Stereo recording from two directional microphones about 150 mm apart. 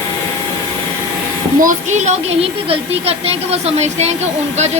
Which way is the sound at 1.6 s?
60° right (ahead or behind).